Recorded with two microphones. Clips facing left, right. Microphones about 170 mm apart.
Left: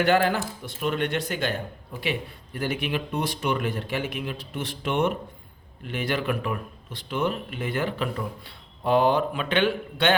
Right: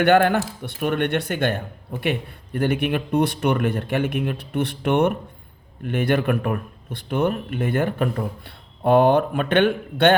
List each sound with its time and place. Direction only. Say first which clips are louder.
0.0 s speech: right 5 dB; 60° right (ahead or behind)